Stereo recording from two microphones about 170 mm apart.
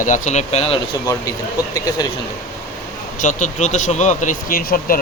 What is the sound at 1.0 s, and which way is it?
Speech, 20° left (ahead or behind).